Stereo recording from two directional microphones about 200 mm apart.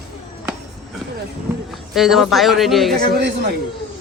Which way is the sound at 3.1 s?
55° right (ahead or behind).